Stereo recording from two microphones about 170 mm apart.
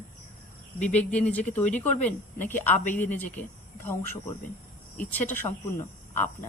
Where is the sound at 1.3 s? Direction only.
10° left (ahead or behind).